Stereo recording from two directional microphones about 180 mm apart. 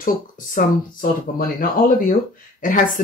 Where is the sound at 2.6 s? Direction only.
50° left (ahead or behind).